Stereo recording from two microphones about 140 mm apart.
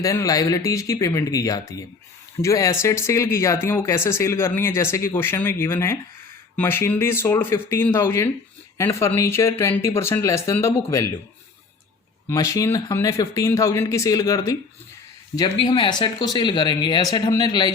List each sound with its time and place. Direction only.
0.0 s speech: 25° left (ahead or behind)
12.3 s speech: 20° left (ahead or behind)